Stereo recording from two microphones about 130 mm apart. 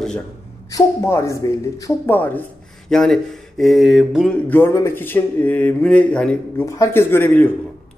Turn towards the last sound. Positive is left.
turn(degrees=15)  # may be behind; listen again after turning